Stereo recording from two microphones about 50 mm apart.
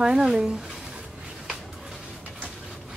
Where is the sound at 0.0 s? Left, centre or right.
Centre.